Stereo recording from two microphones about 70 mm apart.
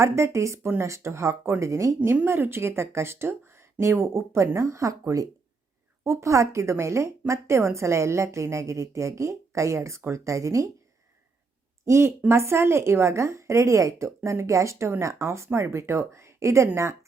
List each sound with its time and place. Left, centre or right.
0.0 s a woman's voice: right
2.2 s a woman's voice: right
11.9 s a woman's voice: right